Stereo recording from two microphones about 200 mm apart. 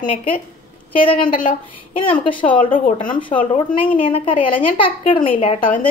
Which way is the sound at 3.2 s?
25° left (ahead or behind).